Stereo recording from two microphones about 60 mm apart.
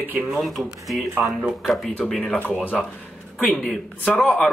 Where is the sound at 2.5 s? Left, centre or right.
Left.